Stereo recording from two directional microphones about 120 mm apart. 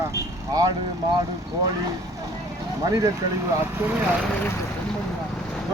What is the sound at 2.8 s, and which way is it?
Speech, 30° right (ahead or behind).